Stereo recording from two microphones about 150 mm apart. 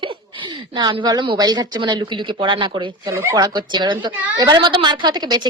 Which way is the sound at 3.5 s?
30° right (ahead or behind).